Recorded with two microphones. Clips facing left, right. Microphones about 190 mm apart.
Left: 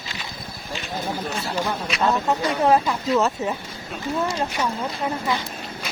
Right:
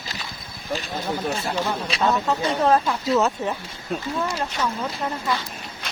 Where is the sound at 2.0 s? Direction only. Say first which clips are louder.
Left 1 dB; centre (ahead or behind).